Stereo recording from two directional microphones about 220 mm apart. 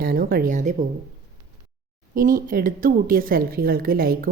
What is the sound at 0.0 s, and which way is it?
Speech, 40° right (ahead or behind).